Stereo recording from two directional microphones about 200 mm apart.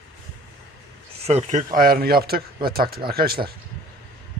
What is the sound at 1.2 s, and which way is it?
Speech, 30° right (ahead or behind).